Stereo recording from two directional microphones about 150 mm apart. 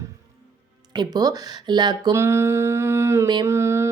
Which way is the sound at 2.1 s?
15° right (ahead or behind).